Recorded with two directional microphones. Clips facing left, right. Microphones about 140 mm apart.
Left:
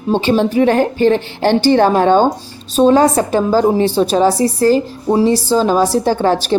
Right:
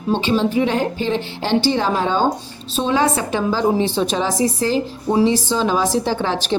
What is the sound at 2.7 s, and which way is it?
A woman's voice, 40° left (ahead or behind).